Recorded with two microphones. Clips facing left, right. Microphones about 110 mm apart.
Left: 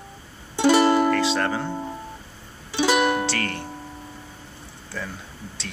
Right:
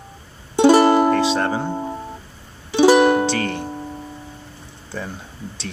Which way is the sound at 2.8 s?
40° right (ahead or behind).